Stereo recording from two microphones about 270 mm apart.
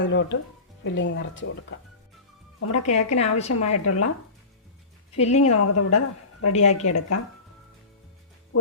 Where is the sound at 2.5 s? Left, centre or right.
Left.